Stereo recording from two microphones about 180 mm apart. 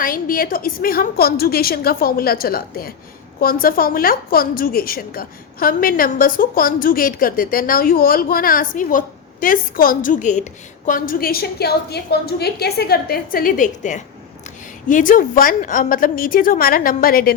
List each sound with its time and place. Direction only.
0.0 s a woman's voice: 50° left (ahead or behind)